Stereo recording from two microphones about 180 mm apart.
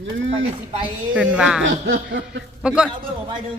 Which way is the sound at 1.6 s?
85° right.